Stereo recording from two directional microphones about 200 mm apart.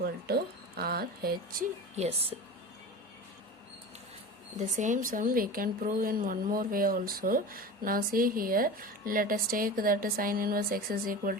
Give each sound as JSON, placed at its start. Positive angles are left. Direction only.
{"t": 0.0, "sound": "a sound", "side_deg": -50}
{"t": 2.0, "sound": "speech", "side_deg": -30}
{"t": 4.5, "sound": "speech", "side_deg": -40}